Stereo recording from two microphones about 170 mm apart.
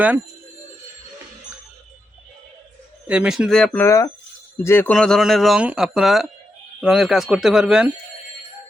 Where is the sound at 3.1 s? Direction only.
5° right (ahead or behind).